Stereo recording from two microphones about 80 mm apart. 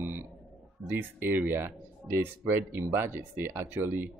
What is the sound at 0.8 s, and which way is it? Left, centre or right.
Speech, right.